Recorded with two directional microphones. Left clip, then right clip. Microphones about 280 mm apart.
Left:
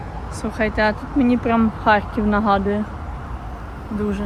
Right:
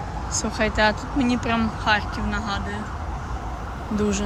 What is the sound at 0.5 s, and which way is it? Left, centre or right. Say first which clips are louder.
Speech: left 2 dB; centre.